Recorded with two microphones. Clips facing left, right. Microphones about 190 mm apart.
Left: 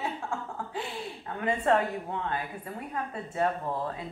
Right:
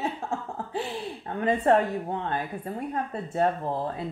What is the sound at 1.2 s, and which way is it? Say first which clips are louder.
A woman's voice: right 4 dB; 35° right (ahead or behind).